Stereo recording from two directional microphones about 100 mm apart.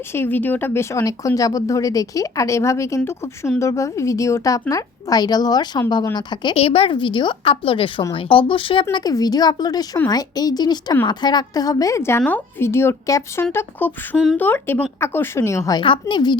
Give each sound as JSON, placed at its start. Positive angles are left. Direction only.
{"t": 0.1, "sound": "a woman's voice", "side_deg": 20}
{"t": 6.6, "sound": "a woman's voice", "side_deg": 80}
{"t": 6.9, "sound": "a woman's voice", "side_deg": 55}
{"t": 15.8, "sound": "speech", "side_deg": 55}